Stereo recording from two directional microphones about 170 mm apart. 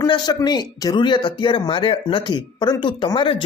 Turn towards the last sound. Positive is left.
turn(degrees=30)  # may be behind; listen again after turning